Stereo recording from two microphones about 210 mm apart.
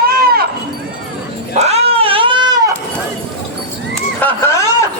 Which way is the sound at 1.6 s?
30° right (ahead or behind).